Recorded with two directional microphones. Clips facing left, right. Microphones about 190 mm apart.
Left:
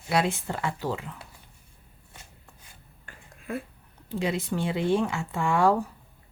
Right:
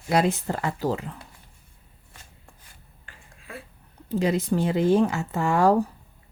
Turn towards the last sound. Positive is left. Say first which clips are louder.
# right 2 dB
turn(degrees=-40)  # may be behind; listen again after turning